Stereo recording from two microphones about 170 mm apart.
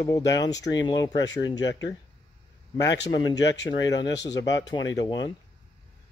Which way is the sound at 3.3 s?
90° left.